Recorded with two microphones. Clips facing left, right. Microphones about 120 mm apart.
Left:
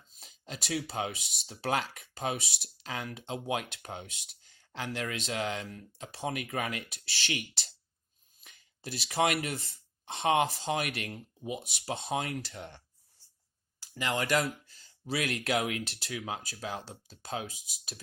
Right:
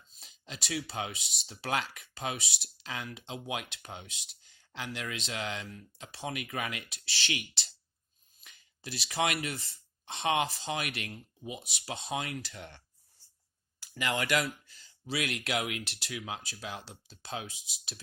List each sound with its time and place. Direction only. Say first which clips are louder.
0.1 s a sound: left 3 dB; 40° left (ahead or behind)
0.9 s speech: left 3 dB; 40° left (ahead or behind)
13.9 s speech: left 1 dB; 30° left (ahead or behind)
14.4 s speech: left 2 dB; 45° left (ahead or behind)